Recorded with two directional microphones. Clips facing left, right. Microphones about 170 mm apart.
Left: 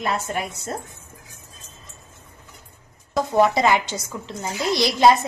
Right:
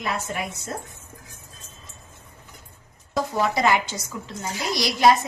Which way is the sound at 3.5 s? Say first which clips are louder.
Left 2 dB; 20° left (ahead or behind).